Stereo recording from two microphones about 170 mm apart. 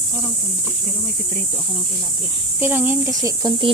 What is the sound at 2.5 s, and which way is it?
Speech, 10° right (ahead or behind).